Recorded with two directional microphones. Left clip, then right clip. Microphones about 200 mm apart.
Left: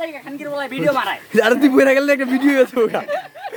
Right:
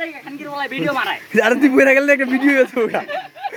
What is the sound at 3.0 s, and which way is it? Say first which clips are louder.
Speech: left 1 dB; 25° left (ahead or behind).